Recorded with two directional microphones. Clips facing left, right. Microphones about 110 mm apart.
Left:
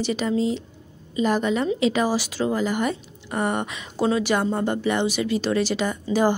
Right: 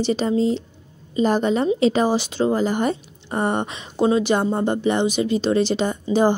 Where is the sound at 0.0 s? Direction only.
30° right (ahead or behind).